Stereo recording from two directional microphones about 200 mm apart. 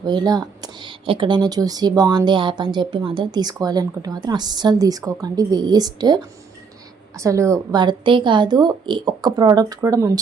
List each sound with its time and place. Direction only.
0.0 s speech: 20° right (ahead or behind)